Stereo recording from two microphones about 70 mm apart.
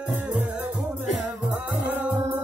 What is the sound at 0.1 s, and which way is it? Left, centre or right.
Music, right.